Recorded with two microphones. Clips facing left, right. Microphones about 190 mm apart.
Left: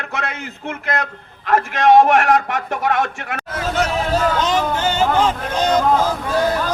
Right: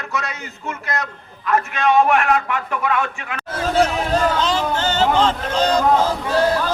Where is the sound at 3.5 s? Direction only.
30° right (ahead or behind).